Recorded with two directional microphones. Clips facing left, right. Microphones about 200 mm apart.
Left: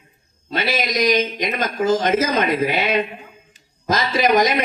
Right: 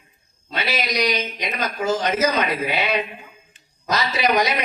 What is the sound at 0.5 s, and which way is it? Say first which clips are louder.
Speech: left 3 dB; 50° left (ahead or behind).